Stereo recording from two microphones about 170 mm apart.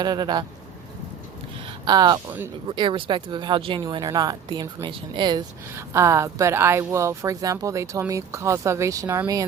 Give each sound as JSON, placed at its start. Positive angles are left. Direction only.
{"t": 0.0, "sound": "speech", "side_deg": -25}
{"t": 1.8, "sound": "speech", "side_deg": -25}